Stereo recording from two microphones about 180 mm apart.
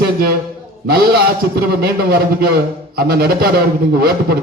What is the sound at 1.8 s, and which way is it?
A man's voice, 60° right (ahead or behind).